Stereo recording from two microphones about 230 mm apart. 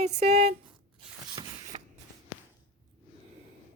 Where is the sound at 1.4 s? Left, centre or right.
Centre.